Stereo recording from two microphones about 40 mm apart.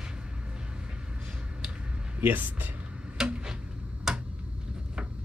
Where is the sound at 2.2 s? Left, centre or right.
Right.